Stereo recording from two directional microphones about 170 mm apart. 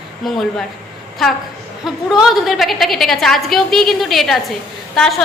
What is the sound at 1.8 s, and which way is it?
A woman's voice, centre (ahead or behind).